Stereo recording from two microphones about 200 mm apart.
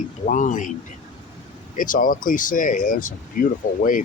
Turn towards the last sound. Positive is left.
turn(degrees=45)  # may be behind; listen again after turning